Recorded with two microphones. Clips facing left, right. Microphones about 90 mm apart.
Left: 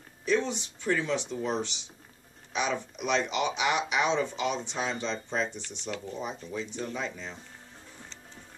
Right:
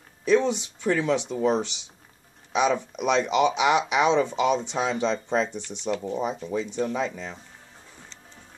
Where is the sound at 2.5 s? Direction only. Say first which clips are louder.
Right 7 dB; 85° right.